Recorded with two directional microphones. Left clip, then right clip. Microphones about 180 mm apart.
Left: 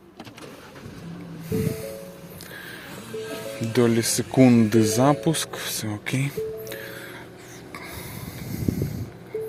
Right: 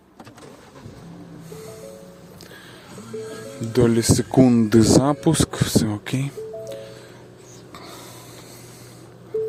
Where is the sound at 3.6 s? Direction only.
25° right (ahead or behind).